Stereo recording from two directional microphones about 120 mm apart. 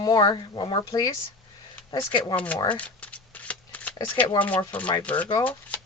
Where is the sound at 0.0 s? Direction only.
35° left (ahead or behind).